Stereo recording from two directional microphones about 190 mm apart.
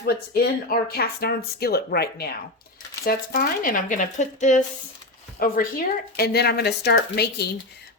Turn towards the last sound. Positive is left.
turn(degrees=60)  # may be behind; listen again after turning